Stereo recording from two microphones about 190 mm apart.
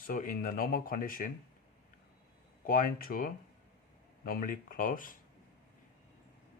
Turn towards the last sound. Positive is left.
turn(degrees=45)  # may be behind; listen again after turning